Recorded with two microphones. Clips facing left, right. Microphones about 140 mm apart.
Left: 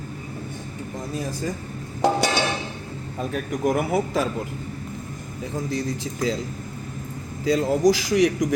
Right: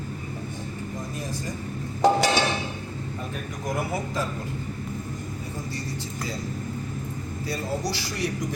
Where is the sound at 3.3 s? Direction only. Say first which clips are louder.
Left 8 dB; 75° left (ahead or behind).